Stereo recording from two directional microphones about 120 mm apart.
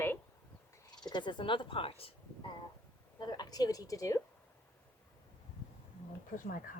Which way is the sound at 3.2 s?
35° left (ahead or behind).